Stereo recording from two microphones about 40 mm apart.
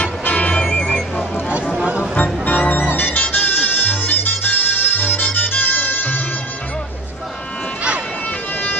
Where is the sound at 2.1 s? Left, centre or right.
Left.